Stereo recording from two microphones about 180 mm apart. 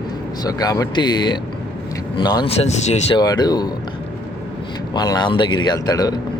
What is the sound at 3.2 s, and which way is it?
Speech, 20° left (ahead or behind).